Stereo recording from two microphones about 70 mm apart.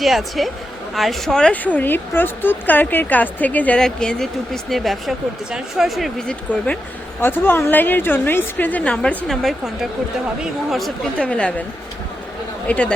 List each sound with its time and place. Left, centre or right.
0.0 s speech: centre
1.6 s speech: left
3.8 s speech: centre
6.2 s speech: centre
7.2 s speech: left
9.2 s speech: centre
11.2 s speech: centre
12.6 s speech: centre